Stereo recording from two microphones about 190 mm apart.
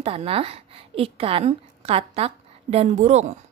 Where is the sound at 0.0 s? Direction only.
30° right (ahead or behind).